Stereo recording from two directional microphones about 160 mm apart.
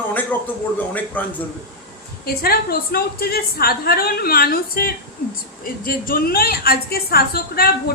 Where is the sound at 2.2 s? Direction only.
70° left (ahead or behind).